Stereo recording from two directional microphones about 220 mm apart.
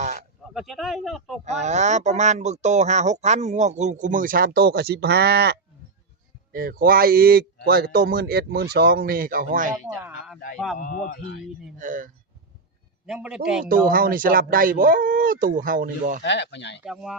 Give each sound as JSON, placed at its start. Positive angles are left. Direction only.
{"t": 0.4, "sound": "speech", "side_deg": 0}
{"t": 1.5, "sound": "speech", "side_deg": -30}
{"t": 9.9, "sound": "speech", "side_deg": -10}
{"t": 10.8, "sound": "speech", "side_deg": 40}
{"t": 11.8, "sound": "speech", "side_deg": -35}
{"t": 13.1, "sound": "speech", "side_deg": -5}
{"t": 13.7, "sound": "speech", "side_deg": -40}
{"t": 16.2, "sound": "speech", "side_deg": 55}
{"t": 16.8, "sound": "speech", "side_deg": 0}